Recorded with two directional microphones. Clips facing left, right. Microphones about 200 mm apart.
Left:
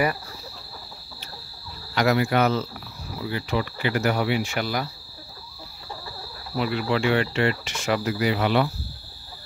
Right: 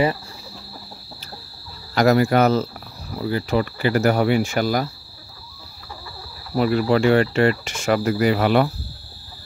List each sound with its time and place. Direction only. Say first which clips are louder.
2.0 s cricket: right 5 dB; 45° right (ahead or behind)
6.5 s cricket: right 6 dB; 45° right (ahead or behind)